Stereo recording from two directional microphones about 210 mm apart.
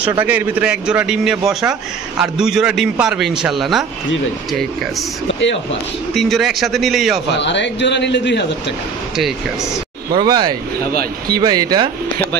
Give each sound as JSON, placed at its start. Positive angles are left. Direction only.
{"t": 0.2, "sound": "a man's voice", "side_deg": -10}
{"t": 6.1, "sound": "a man's voice", "side_deg": 0}
{"t": 7.3, "sound": "a man's voice", "side_deg": 55}
{"t": 9.1, "sound": "a man's voice", "side_deg": 0}
{"t": 10.1, "sound": "speech", "side_deg": -20}
{"t": 10.9, "sound": "speech", "side_deg": -45}
{"t": 11.3, "sound": "speech", "side_deg": -20}